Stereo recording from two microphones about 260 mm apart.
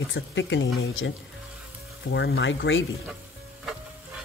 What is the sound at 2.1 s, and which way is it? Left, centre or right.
Speech, left.